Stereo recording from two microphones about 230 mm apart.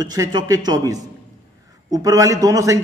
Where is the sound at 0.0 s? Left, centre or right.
Centre.